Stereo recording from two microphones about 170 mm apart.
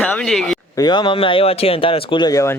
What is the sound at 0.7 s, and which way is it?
Speech, 25° left (ahead or behind).